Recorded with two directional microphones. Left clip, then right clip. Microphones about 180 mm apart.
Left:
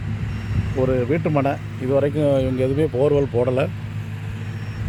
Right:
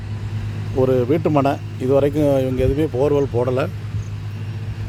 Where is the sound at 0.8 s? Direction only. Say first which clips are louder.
Right 3 dB; 25° right (ahead or behind); by 3.7 s 5° right (ahead or behind).